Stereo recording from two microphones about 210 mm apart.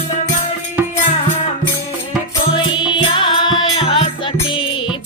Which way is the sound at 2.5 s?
25° left (ahead or behind).